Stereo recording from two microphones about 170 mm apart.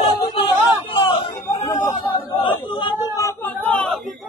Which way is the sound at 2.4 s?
25° left (ahead or behind).